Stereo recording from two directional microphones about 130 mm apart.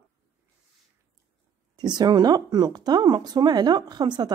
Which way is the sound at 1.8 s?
35° right (ahead or behind).